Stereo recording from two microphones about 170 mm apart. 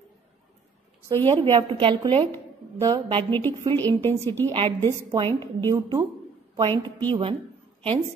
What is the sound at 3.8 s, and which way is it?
A woman's voice, 10° left (ahead or behind).